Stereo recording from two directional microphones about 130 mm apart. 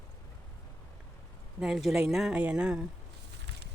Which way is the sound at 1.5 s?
5° right (ahead or behind).